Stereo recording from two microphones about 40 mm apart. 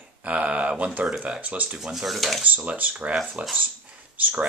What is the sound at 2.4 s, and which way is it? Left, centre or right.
Speech, right.